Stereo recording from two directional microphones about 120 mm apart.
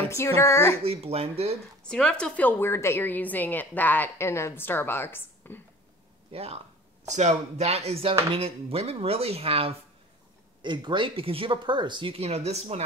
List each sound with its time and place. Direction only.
0.1 s speech: 20° left (ahead or behind)
0.8 s speech: 55° right (ahead or behind)
1.9 s a woman's voice: 5° left (ahead or behind)
6.3 s speech: 55° right (ahead or behind)
7.1 s speech: 70° right (ahead or behind); by 9.8 s 50° right (ahead or behind)
10.6 s speech: 40° right (ahead or behind); by 12.8 s 65° right (ahead or behind)